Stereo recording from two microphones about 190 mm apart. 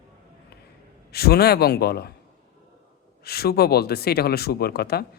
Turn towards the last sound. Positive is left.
turn(degrees=55)  # may be behind; listen again after turning